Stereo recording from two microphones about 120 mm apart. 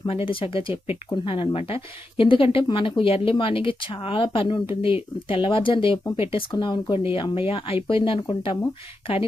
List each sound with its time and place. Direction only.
0.1 s speech: 50° left (ahead or behind)
7.0 s speech: 50° left (ahead or behind)